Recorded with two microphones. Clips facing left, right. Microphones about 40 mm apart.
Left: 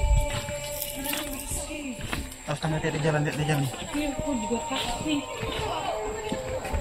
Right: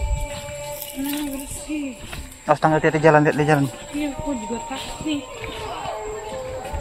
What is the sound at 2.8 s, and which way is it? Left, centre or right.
Speech, right.